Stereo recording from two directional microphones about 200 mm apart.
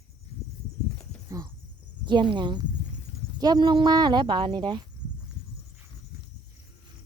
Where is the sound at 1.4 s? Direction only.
15° right (ahead or behind).